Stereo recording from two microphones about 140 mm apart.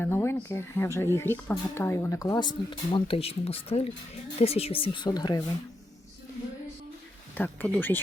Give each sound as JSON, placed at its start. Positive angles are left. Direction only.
{"t": 0.0, "sound": "speech", "side_deg": 15}
{"t": 7.3, "sound": "speech", "side_deg": 10}